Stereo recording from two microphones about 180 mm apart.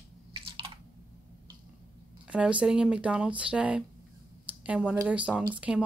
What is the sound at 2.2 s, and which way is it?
Speech, 5° right (ahead or behind).